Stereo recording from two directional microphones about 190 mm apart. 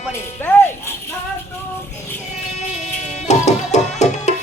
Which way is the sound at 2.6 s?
35° left (ahead or behind).